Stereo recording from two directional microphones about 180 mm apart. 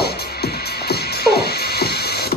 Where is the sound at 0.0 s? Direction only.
60° left (ahead or behind).